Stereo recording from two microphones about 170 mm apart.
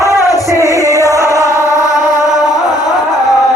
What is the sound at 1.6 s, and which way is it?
Music, 20° left (ahead or behind).